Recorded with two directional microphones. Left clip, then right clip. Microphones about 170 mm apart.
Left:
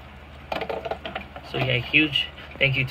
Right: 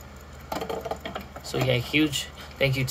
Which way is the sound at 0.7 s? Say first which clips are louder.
Left 2 dB; 20° right (ahead or behind).